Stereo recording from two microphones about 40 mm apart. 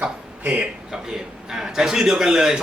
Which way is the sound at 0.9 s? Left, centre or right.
Centre.